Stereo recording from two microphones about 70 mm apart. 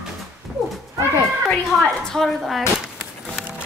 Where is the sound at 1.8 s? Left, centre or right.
Centre.